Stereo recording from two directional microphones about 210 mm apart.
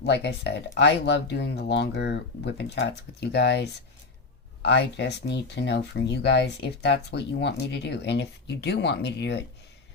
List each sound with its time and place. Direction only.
0.0 s speech: 55° left (ahead or behind)